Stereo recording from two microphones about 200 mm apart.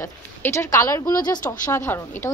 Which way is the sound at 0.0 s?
15° left (ahead or behind).